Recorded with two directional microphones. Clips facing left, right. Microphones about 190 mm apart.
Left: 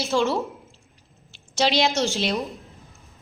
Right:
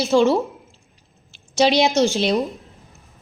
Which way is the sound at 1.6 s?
15° right (ahead or behind).